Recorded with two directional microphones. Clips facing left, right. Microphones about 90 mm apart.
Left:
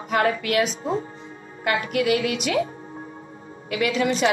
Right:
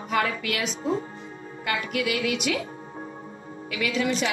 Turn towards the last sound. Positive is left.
turn(degrees=45)  # may be behind; listen again after turning